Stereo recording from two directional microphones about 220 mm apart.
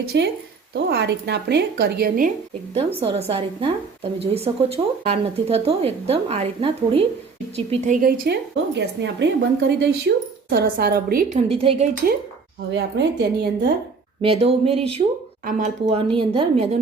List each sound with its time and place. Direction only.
0.1 s a woman's voice: 50° right (ahead or behind)
2.7 s speech: 25° right (ahead or behind)
8.0 s a woman's voice: 40° right (ahead or behind)
11.4 s speech: 25° right (ahead or behind)
12.7 s a woman's voice: 50° right (ahead or behind)
14.2 s speech: 25° right (ahead or behind)